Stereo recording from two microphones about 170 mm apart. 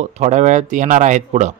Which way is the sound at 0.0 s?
45° right (ahead or behind).